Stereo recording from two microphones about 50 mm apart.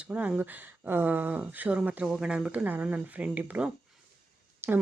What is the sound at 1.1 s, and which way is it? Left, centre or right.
Speech, right.